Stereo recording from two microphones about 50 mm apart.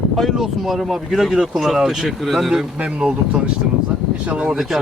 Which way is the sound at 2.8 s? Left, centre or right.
Centre.